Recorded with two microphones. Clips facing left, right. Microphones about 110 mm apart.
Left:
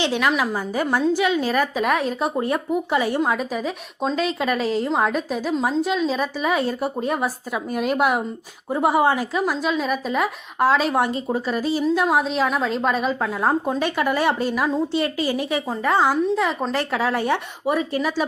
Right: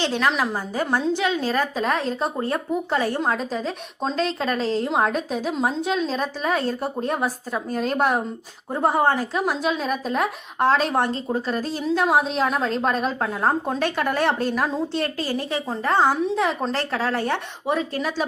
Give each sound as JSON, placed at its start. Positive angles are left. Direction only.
{"t": 0.0, "sound": "a woman's voice", "side_deg": 10}
{"t": 16.7, "sound": "a woman's voice", "side_deg": 15}